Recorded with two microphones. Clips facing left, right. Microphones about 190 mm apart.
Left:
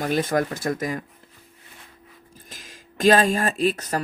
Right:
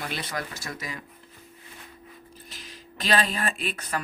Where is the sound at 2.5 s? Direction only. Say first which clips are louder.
Left 1 dB; 45° left (ahead or behind).